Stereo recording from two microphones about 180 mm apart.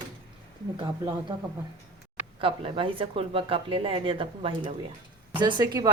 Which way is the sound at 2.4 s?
30° right (ahead or behind).